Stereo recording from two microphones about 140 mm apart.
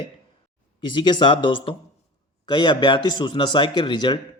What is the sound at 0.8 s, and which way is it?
A man's voice, 35° left (ahead or behind).